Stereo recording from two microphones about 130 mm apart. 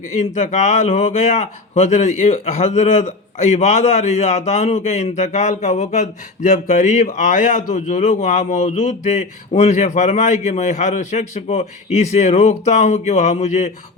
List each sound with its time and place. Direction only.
0.2 s speech: 65° left (ahead or behind)